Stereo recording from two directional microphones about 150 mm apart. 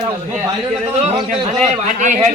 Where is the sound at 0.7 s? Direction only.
45° right (ahead or behind).